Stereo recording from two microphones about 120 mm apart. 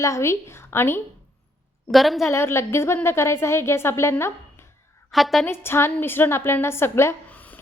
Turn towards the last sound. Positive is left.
turn(degrees=15)  # may be behind; listen again after turning